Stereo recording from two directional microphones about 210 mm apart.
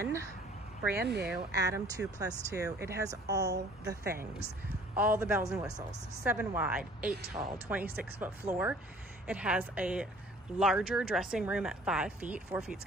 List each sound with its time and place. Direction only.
0.9 s speech: 50° right (ahead or behind)
1.5 s a woman's voice: 15° right (ahead or behind)